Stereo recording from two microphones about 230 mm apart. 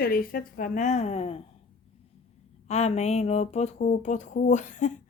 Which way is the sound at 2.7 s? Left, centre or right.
Left.